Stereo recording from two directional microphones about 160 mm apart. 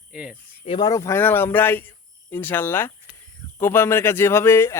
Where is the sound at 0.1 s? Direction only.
5° right (ahead or behind).